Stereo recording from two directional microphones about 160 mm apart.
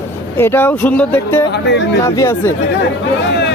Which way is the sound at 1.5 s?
90° left.